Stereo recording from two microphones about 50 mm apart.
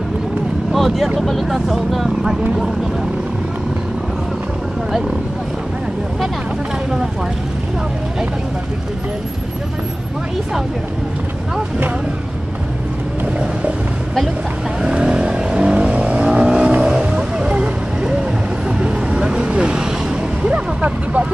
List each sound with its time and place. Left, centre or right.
0.7 s speech: centre
14.8 s vehicle: right